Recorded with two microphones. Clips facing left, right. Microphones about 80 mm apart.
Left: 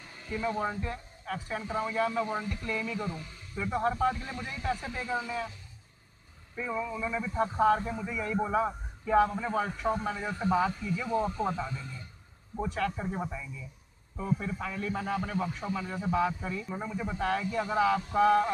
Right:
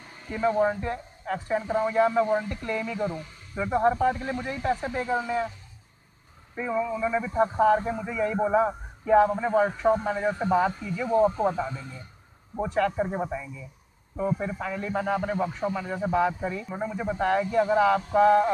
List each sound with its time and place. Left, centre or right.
0.3 s a man's voice: right
7.0 s a man's voice: right
10.5 s a man's voice: right
11.1 s a man's voice: right
12.9 s a man's voice: right
14.1 s a man's voice: right